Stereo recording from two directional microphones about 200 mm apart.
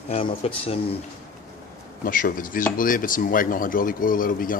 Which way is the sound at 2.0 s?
45° left (ahead or behind).